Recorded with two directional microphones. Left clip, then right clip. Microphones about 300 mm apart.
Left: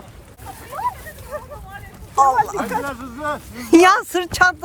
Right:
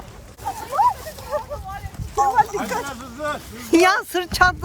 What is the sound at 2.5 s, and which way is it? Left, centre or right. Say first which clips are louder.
Speech: left 2 dB; centre.